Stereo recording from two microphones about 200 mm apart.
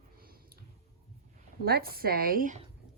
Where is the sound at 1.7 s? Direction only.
50° right (ahead or behind).